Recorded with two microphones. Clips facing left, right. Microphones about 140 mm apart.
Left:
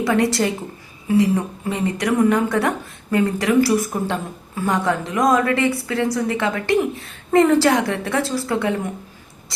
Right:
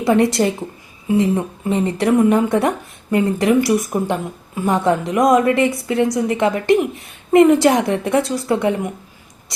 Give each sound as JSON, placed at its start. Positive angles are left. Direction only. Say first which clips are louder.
{"t": 0.0, "sound": "a woman's voice", "louder": "right 3 dB", "side_deg": -20}